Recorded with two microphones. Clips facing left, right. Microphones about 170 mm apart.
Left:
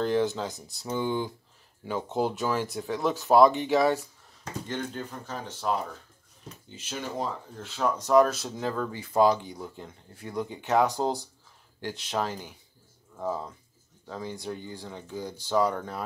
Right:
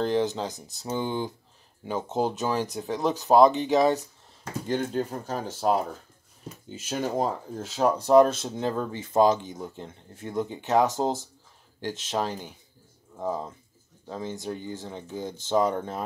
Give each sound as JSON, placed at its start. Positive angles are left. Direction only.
{"t": 0.0, "sound": "speech", "side_deg": -20}
{"t": 4.6, "sound": "speech", "side_deg": -35}
{"t": 8.1, "sound": "speech", "side_deg": -25}